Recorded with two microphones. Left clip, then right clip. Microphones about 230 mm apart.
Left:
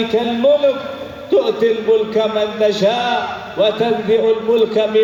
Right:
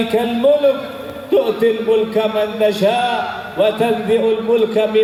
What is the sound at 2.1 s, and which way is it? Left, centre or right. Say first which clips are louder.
A man's voice: even; centre.